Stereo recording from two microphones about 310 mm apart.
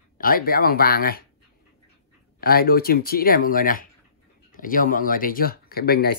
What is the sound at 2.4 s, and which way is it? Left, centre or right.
Speech, left.